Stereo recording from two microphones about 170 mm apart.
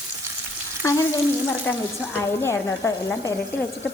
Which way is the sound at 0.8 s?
15° left (ahead or behind).